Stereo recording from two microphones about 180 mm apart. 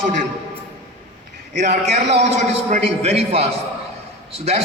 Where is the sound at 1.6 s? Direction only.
45° right (ahead or behind).